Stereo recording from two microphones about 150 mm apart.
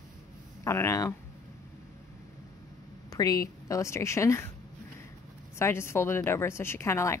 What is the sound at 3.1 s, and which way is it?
A woman's voice, 25° left (ahead or behind).